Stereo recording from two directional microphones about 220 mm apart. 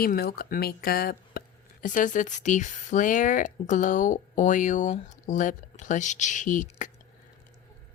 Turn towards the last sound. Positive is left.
turn(degrees=35)  # may be behind; listen again after turning